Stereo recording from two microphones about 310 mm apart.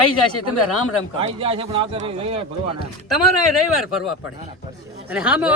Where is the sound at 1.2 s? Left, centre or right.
Centre.